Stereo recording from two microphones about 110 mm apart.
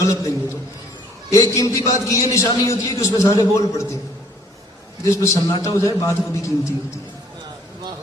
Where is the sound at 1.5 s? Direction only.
30° left (ahead or behind).